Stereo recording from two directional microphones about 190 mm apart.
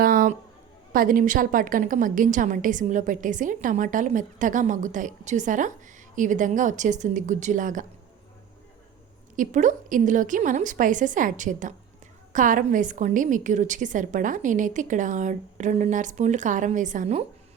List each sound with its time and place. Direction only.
0.0 s a sound: 50° right (ahead or behind)
0.9 s a woman's voice: 45° right (ahead or behind)
9.3 s a woman's voice: 45° right (ahead or behind)